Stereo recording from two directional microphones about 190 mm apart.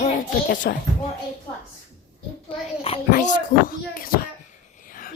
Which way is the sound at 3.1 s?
45° left (ahead or behind).